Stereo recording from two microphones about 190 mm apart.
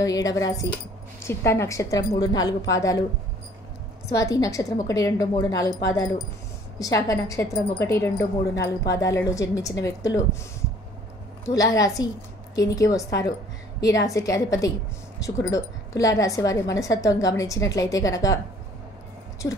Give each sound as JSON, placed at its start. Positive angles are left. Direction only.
{"t": 0.0, "sound": "a woman's voice", "side_deg": 20}
{"t": 4.1, "sound": "a woman's voice", "side_deg": 15}
{"t": 11.4, "sound": "a woman's voice", "side_deg": 15}